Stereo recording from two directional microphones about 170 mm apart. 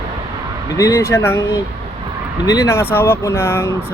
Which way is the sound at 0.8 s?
20° left (ahead or behind).